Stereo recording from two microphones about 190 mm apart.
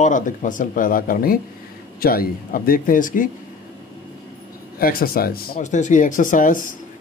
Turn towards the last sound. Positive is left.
turn(degrees=45)  # may be behind; listen again after turning